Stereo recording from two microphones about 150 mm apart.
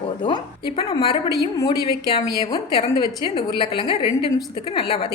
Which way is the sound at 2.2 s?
25° left (ahead or behind).